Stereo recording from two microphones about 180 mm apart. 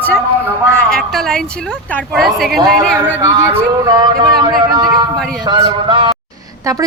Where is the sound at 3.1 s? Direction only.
15° right (ahead or behind).